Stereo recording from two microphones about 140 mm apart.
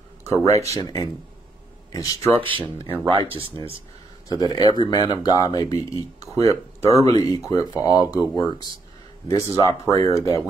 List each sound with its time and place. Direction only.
0.3 s speech: 20° left (ahead or behind)
2.3 s speech: 40° right (ahead or behind)
4.3 s speech: 30° left (ahead or behind)